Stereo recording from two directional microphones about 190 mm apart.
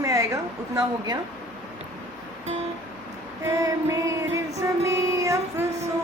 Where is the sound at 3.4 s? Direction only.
15° right (ahead or behind).